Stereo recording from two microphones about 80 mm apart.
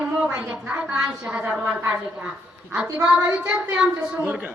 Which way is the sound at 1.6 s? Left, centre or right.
Right.